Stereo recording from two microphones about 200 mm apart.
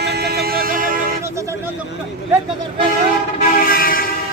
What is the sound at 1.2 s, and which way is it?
Speech, 15° right (ahead or behind).